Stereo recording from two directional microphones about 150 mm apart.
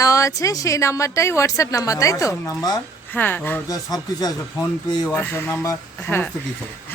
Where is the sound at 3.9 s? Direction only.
25° left (ahead or behind).